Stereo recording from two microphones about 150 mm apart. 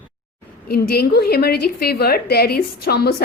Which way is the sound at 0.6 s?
90° left.